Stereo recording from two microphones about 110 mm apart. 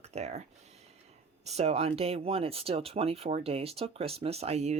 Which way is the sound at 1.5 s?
75° right (ahead or behind).